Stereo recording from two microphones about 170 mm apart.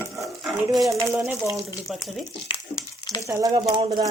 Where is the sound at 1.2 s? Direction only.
15° right (ahead or behind).